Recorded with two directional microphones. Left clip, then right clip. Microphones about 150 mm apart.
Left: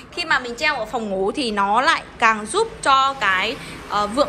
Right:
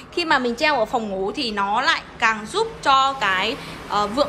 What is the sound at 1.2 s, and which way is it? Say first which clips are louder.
A woman's voice: left 3 dB; 10° right (ahead or behind).